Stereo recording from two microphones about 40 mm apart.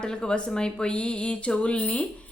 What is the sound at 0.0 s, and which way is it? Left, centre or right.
Speech, centre.